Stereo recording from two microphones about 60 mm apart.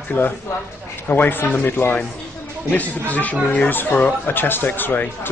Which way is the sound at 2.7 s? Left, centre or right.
Left.